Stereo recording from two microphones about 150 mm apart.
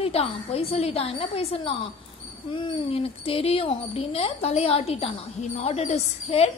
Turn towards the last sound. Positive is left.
turn(degrees=45)  # may be behind; listen again after turning